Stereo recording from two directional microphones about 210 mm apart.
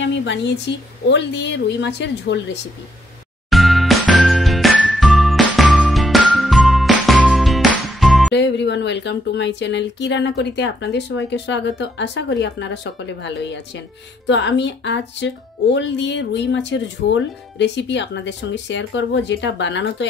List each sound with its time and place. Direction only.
0.0 s speech: 60° left (ahead or behind)
3.4 s music: centre (ahead or behind)
8.4 s speech: 55° left (ahead or behind)